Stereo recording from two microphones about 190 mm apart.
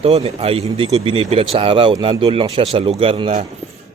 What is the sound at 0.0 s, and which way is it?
Speech, 35° right (ahead or behind).